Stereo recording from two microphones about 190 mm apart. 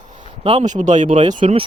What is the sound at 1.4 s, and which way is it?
Speech, 30° right (ahead or behind).